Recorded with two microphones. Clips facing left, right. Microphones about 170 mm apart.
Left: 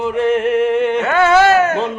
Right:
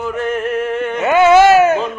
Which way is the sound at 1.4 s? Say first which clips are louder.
Right 3 dB; 10° right (ahead or behind).